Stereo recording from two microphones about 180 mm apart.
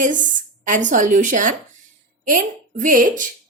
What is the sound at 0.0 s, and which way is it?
A woman's voice, 45° right (ahead or behind).